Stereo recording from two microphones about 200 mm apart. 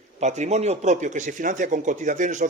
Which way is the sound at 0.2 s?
35° right (ahead or behind).